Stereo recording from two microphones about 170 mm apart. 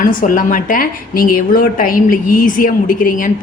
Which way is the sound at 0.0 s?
50° left (ahead or behind).